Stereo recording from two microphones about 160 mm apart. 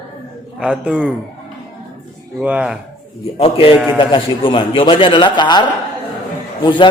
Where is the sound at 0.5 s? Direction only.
5° right (ahead or behind).